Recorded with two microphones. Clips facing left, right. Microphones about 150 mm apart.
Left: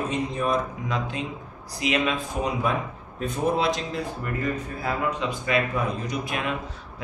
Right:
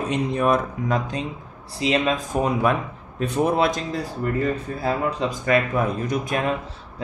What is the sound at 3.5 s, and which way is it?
Speech, 55° right (ahead or behind).